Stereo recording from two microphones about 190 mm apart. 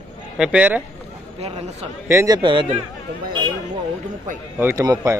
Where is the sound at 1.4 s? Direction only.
35° right (ahead or behind).